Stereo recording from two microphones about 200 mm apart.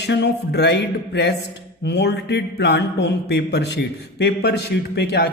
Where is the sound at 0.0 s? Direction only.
60° left (ahead or behind).